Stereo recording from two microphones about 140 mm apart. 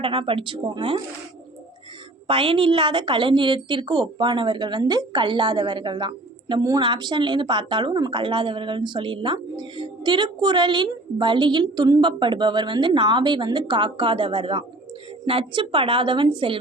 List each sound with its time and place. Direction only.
0.0 s a woman's voice: 40° right (ahead or behind)
2.2 s a woman's voice: 40° right (ahead or behind)